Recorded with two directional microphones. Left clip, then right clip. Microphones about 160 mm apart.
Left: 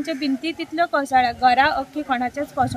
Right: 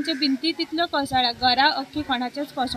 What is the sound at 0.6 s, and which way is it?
Speech, 10° left (ahead or behind).